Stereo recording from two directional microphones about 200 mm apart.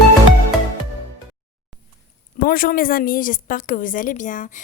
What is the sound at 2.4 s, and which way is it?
A woman's voice, 45° left (ahead or behind).